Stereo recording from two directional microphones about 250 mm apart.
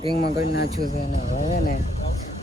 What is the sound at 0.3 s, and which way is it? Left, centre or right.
Speech, left.